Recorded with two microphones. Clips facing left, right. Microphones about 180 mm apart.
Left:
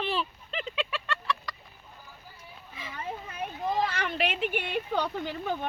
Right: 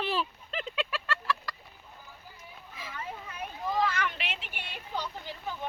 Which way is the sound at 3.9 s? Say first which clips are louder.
Left 5 dB; 35° left (ahead or behind).